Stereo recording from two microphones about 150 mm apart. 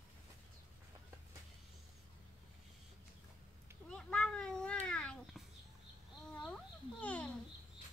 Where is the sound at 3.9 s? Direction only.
5° left (ahead or behind).